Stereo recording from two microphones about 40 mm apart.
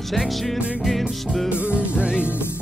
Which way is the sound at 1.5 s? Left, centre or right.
Right.